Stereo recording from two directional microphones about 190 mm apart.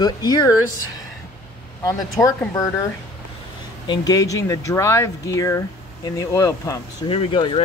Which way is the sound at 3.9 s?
20° left (ahead or behind).